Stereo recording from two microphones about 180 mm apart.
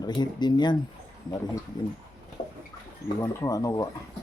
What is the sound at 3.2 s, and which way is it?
Speech, 20° left (ahead or behind).